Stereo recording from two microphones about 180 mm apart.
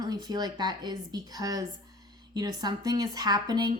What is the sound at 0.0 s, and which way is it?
A woman's voice, 20° right (ahead or behind).